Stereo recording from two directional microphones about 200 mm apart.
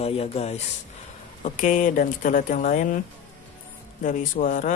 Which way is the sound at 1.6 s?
40° left (ahead or behind).